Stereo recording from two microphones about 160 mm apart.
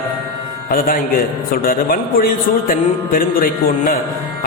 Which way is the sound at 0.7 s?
60° left (ahead or behind).